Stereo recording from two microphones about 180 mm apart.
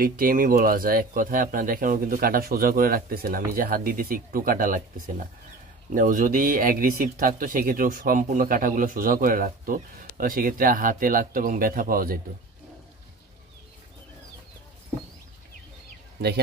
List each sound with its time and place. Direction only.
0.0 s speech: 50° right (ahead or behind)